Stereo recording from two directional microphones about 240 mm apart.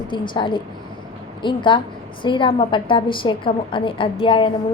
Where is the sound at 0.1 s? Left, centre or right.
Centre.